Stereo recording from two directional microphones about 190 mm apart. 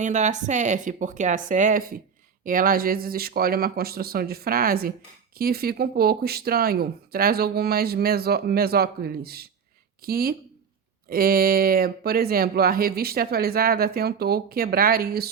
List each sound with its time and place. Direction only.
0.0 s a woman's voice: 40° right (ahead or behind)